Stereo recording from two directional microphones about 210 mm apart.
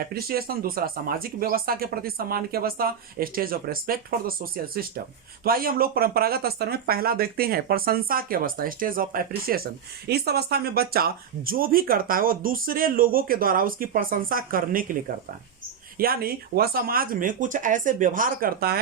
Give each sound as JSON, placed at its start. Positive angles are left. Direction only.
{"t": 0.0, "sound": "speech", "side_deg": -45}
{"t": 16.0, "sound": "speech", "side_deg": -45}